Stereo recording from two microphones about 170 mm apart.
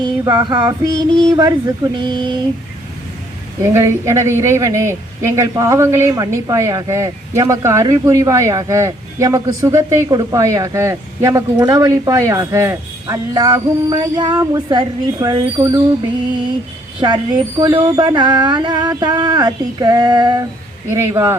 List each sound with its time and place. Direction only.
0.0 s speech: 20° right (ahead or behind)
3.8 s speech: 15° right (ahead or behind)
17.0 s speech: 25° right (ahead or behind)